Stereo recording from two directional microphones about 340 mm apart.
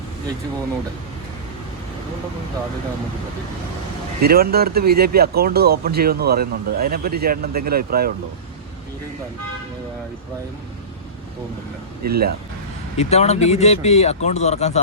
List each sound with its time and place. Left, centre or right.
4.2 s speech: right
12.0 s speech: right
13.0 s speech: centre